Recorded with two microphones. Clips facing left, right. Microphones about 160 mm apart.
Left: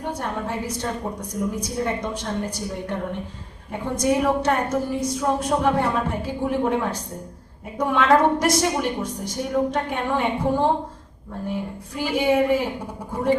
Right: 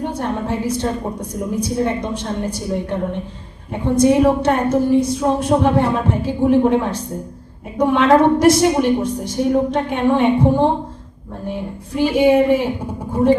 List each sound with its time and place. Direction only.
0.0 s a woman's voice: 25° right (ahead or behind)
3.7 s a woman's voice: 30° right (ahead or behind)